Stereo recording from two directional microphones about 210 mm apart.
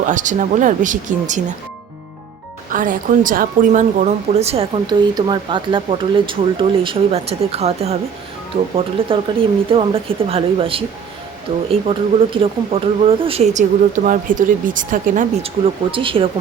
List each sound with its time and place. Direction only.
0.0 s speech: 35° right (ahead or behind)
2.6 s a woman's voice: 40° right (ahead or behind)
15.9 s a woman's voice: 25° right (ahead or behind)